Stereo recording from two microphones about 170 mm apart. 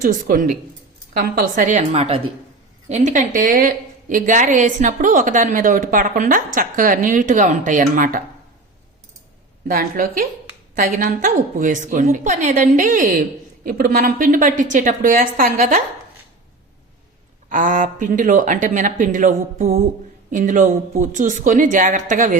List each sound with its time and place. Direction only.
0.0 s a woman's voice: 50° right (ahead or behind); by 2.3 s 35° right (ahead or behind)
2.9 s a woman's voice: 45° right (ahead or behind)
9.6 s a woman's voice: 55° right (ahead or behind)
17.5 s a woman's voice: 50° right (ahead or behind)